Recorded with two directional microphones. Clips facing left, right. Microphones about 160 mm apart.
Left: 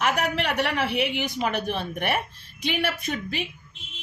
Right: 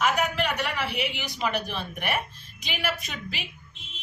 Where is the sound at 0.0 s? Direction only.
65° left (ahead or behind).